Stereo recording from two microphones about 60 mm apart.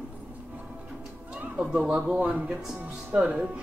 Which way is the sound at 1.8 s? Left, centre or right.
Centre.